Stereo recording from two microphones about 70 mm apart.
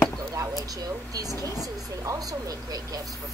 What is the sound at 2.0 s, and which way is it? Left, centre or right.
Speech, right.